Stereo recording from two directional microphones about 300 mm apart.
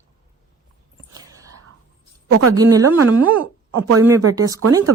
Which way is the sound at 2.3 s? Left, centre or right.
Right.